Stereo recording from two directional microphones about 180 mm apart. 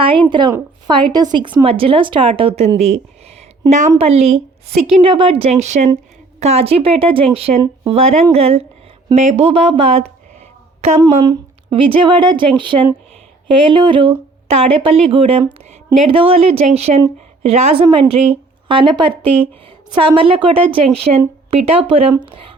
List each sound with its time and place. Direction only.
0.0 s a woman's voice: 30° right (ahead or behind)
10.8 s a sound: 35° right (ahead or behind)
11.3 s a woman's voice: 30° right (ahead or behind)
17.8 s a woman's voice: 20° right (ahead or behind)